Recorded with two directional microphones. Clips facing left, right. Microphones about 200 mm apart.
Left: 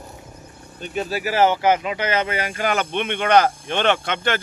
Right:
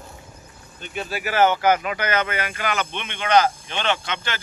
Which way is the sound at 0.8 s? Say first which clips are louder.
Left 4 dB; 40° left (ahead or behind).